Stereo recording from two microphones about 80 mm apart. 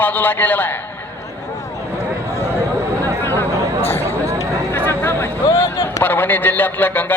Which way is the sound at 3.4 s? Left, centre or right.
Left.